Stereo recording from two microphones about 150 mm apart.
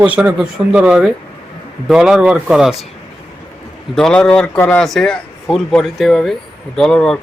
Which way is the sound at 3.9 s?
5° left (ahead or behind).